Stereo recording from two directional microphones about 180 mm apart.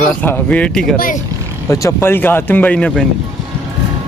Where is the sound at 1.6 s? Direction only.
15° left (ahead or behind).